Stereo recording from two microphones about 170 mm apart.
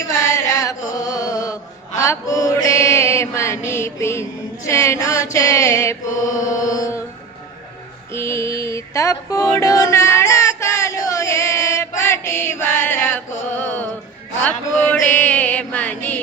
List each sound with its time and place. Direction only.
0.2 s carnatic music: 15° left (ahead or behind)
0.9 s mantra: 20° left (ahead or behind)
6.1 s mantra: 50° left (ahead or behind)
6.6 s mantra: 20° left (ahead or behind)
8.1 s a sound: 15° left (ahead or behind)
13.6 s music: 10° left (ahead or behind)
14.4 s a sound: 10° left (ahead or behind)